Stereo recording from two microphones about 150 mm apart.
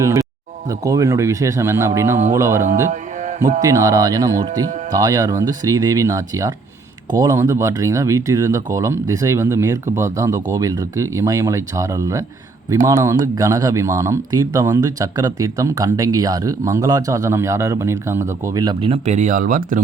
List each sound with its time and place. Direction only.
0.0 s speech: 20° right (ahead or behind)
18.8 s speech: 45° right (ahead or behind); by 19.8 s 60° right (ahead or behind)